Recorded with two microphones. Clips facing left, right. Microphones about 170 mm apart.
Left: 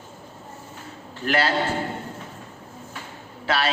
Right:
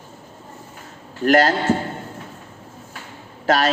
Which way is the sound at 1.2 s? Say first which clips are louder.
Right 7 dB; 45° right (ahead or behind).